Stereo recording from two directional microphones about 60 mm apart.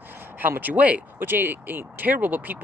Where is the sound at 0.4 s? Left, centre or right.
Right.